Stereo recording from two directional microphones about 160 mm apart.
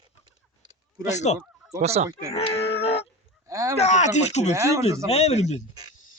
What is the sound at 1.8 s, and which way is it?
Speech, 45° right (ahead or behind).